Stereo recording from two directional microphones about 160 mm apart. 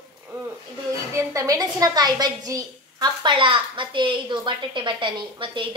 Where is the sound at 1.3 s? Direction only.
20° right (ahead or behind).